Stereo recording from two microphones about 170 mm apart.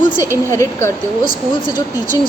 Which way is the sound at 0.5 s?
15° left (ahead or behind).